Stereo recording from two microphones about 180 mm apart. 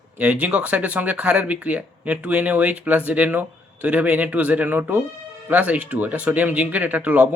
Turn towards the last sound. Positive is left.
turn(degrees=-10)  # may be behind; listen again after turning